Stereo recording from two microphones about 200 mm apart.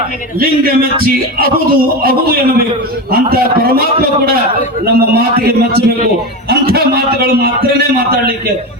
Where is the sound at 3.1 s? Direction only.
50° right (ahead or behind).